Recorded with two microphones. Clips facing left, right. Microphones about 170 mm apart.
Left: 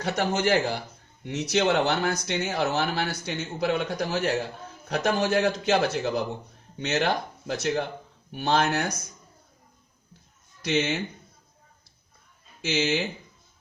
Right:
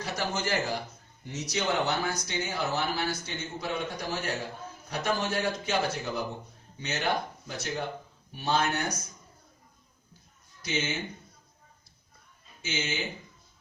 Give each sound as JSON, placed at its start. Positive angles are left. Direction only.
{"t": 0.0, "sound": "a man's voice", "side_deg": 65}
{"t": 10.6, "sound": "speech", "side_deg": 70}
{"t": 12.6, "sound": "speech", "side_deg": 70}